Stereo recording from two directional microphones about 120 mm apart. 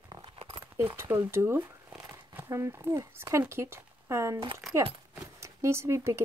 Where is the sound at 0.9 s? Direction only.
20° right (ahead or behind).